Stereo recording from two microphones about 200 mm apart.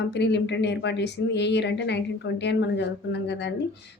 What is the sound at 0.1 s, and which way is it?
A woman's voice, 60° left (ahead or behind).